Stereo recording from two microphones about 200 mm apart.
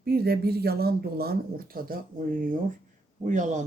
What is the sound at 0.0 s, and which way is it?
A woman's voice, 50° right (ahead or behind).